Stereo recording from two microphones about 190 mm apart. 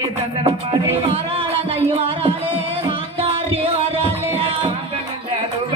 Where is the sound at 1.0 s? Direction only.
30° right (ahead or behind).